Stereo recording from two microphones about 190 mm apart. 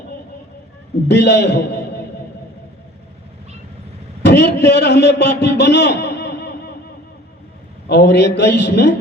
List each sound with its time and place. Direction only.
1.0 s a man's voice: 65° left (ahead or behind)
4.2 s a man's voice: 60° left (ahead or behind)
7.9 s a man's voice: 65° left (ahead or behind)